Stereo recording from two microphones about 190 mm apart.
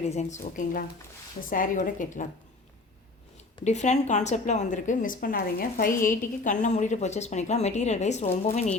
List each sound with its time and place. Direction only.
0.0 s a woman's voice: 35° left (ahead or behind)
3.6 s a woman's voice: 35° left (ahead or behind)